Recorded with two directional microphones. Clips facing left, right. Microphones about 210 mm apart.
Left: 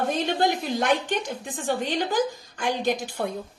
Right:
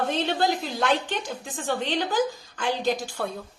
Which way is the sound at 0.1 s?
15° left (ahead or behind).